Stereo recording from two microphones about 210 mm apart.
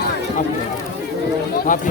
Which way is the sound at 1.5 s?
40° left (ahead or behind).